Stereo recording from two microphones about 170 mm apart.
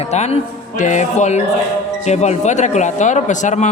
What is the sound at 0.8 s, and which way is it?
A man's voice, 45° left (ahead or behind).